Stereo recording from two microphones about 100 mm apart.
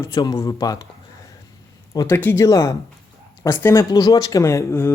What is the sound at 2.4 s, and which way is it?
A man's voice, 35° left (ahead or behind).